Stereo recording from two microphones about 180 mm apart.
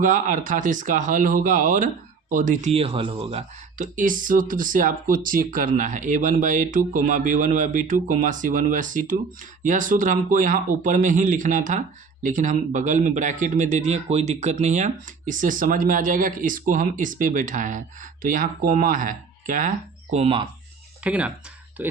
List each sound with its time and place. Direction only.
0.0 s speech: 45° right (ahead or behind)
21.0 s speech: 5° right (ahead or behind)